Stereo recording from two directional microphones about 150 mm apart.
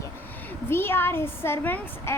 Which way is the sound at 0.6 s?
15° left (ahead or behind).